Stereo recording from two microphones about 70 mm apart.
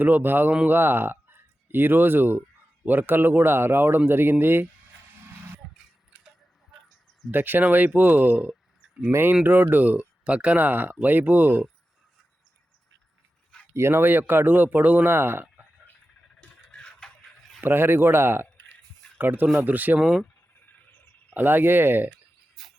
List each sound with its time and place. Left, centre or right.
0.0 s a man's voice: right
7.3 s speech: right
13.7 s a man's voice: right
16.4 s music: centre
17.6 s a man's voice: right
20.0 s speech: centre
21.3 s speech: right